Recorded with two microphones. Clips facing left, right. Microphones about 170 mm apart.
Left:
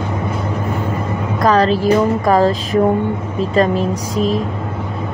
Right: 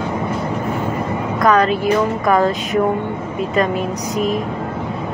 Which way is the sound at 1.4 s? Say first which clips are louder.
Left 2 dB; 30° left (ahead or behind).